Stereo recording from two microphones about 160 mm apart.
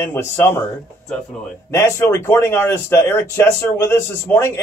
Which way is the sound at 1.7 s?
20° left (ahead or behind).